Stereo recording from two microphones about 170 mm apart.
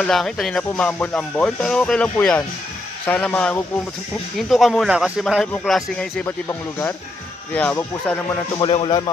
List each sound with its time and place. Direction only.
0.0 s speech: centre (ahead or behind)
7.5 s speech: 10° left (ahead or behind)
8.5 s speech: 30° left (ahead or behind)